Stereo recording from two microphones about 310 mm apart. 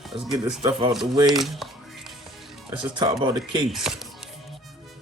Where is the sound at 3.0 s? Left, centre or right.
Centre.